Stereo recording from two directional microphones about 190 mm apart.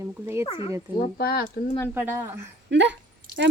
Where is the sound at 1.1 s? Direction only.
50° left (ahead or behind).